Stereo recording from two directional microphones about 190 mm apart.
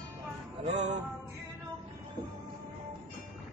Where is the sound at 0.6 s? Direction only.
35° right (ahead or behind).